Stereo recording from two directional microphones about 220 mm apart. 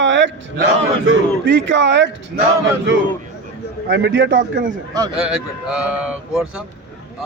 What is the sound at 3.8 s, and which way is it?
Speech, 50° right (ahead or behind).